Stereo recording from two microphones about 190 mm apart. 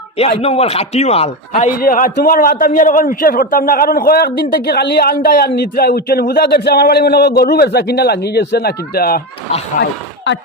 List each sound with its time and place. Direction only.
0.2 s a man's voice: 30° left (ahead or behind)
1.8 s a man's voice: 50° left (ahead or behind)